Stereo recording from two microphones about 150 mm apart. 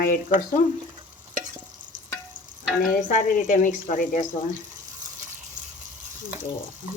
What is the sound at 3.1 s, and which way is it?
Speech, 60° left (ahead or behind).